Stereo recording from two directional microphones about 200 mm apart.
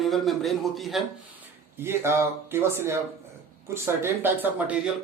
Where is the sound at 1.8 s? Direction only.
10° right (ahead or behind).